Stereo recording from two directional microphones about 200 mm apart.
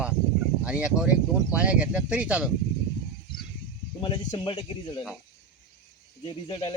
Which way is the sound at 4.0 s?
25° left (ahead or behind).